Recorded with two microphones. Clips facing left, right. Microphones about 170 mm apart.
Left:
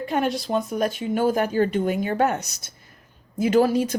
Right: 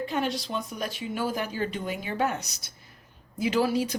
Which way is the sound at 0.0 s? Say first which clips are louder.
Left 5 dB; 50° left (ahead or behind).